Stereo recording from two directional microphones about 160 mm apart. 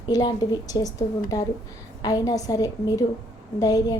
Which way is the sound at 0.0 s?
25° left (ahead or behind).